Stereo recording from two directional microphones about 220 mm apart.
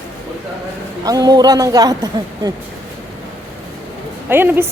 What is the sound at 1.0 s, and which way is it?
A woman's voice, 15° right (ahead or behind).